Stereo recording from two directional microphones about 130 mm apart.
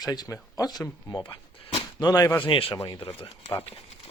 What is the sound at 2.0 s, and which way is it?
Speech, 25° left (ahead or behind).